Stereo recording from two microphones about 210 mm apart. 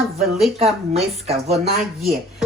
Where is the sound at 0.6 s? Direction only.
30° right (ahead or behind).